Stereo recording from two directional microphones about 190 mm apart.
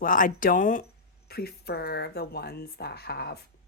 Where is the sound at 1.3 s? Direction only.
55° left (ahead or behind).